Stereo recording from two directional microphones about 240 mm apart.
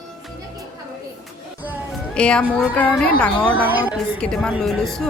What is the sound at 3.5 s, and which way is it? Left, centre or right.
Speech, centre.